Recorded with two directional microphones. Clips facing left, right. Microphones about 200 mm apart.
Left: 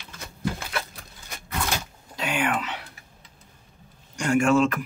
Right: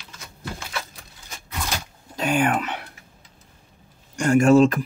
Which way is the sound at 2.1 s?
45° right (ahead or behind).